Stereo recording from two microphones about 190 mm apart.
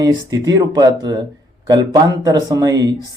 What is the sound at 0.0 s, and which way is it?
Speech, 20° right (ahead or behind).